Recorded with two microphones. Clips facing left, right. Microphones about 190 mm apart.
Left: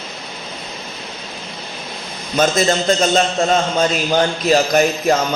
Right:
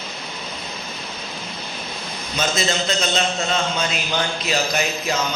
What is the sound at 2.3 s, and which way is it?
A man's voice, 50° left (ahead or behind).